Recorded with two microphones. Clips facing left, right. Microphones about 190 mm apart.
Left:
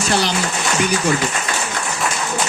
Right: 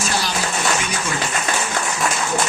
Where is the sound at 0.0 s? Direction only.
65° left (ahead or behind).